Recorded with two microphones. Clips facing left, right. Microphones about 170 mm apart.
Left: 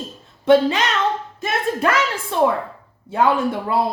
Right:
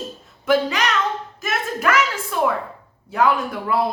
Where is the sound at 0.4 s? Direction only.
25° left (ahead or behind).